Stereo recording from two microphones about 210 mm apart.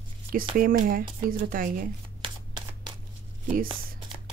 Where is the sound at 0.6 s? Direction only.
40° right (ahead or behind).